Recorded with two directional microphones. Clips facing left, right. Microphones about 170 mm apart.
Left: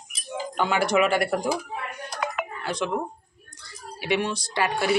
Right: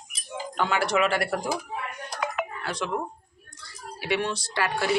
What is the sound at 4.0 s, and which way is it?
Speech, 15° left (ahead or behind).